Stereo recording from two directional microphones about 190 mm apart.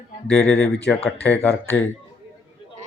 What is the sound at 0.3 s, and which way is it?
Speech, 5° left (ahead or behind).